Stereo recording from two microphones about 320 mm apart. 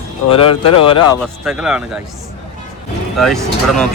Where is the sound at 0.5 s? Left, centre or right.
Left.